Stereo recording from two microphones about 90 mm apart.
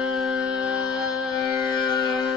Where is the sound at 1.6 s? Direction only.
55° left (ahead or behind).